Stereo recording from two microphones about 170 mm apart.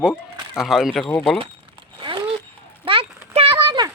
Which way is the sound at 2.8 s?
30° right (ahead or behind).